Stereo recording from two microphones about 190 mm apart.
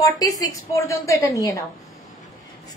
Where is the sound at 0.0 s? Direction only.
20° left (ahead or behind).